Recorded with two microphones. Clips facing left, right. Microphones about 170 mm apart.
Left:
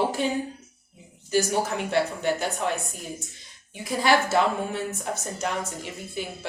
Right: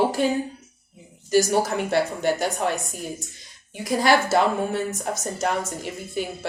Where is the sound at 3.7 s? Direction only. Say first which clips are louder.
Right 3 dB; 40° right (ahead or behind).